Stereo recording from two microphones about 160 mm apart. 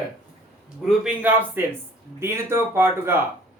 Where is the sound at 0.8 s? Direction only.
5° right (ahead or behind).